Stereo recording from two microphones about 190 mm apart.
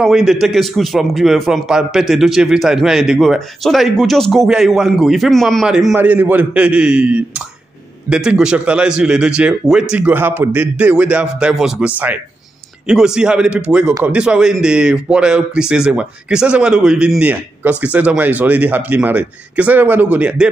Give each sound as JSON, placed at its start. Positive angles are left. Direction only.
{"t": 0.0, "sound": "a man's voice", "side_deg": 0}